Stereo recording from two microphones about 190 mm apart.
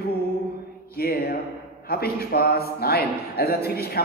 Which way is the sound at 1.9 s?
55° left (ahead or behind).